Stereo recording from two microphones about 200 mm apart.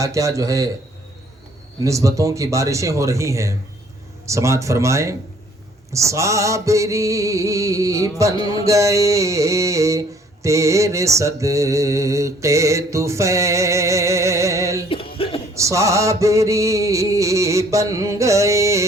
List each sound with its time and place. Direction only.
0.0 s mantra: 15° right (ahead or behind)
1.8 s mantra: 15° right (ahead or behind)
14.8 s music: 25° left (ahead or behind)
15.5 s mantra: 15° right (ahead or behind)